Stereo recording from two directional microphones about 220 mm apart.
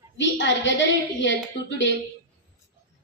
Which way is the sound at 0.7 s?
55° left (ahead or behind).